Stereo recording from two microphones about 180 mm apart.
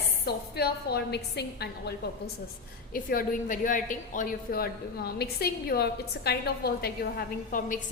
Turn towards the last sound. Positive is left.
turn(degrees=55)  # may be behind; listen again after turning